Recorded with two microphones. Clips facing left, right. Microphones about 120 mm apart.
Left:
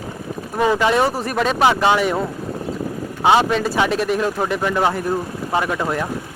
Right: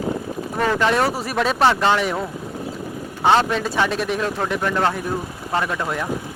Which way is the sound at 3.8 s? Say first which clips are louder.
Left 3 dB; centre (ahead or behind).